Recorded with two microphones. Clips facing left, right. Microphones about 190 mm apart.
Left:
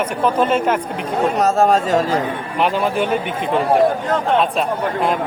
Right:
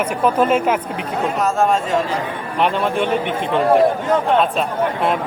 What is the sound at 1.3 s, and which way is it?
Speech, 40° left (ahead or behind).